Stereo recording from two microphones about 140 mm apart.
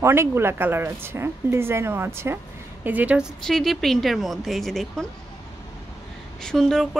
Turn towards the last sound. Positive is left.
turn(degrees=5)  # may be behind; listen again after turning